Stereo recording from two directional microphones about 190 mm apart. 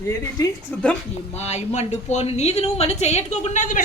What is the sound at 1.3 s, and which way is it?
A woman's voice, 35° left (ahead or behind).